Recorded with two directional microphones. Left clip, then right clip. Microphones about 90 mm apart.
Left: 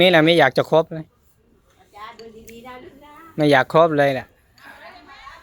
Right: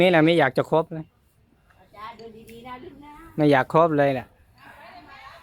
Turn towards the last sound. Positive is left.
turn(degrees=-15)  # may be behind; listen again after turning